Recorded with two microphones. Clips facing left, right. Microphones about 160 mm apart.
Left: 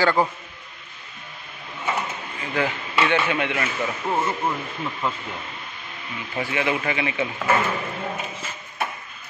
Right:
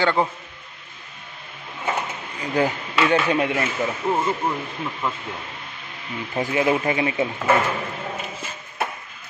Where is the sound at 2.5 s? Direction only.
40° right (ahead or behind).